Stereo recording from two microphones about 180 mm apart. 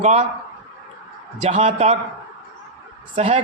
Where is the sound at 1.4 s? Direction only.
35° right (ahead or behind).